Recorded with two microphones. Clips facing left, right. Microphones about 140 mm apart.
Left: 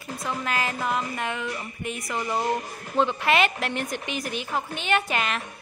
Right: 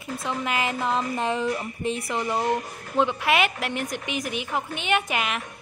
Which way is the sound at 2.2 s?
15° right (ahead or behind).